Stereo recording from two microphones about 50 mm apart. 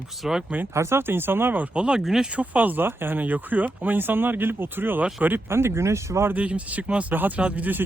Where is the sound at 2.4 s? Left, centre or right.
Right.